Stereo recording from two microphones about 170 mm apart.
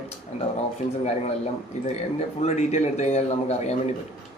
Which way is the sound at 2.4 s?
40° left (ahead or behind).